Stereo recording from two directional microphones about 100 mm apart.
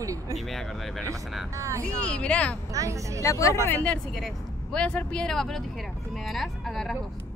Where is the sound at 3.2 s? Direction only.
30° left (ahead or behind).